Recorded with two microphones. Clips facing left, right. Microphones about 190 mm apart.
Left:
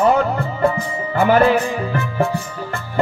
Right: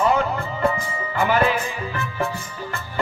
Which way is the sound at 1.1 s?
45° left (ahead or behind).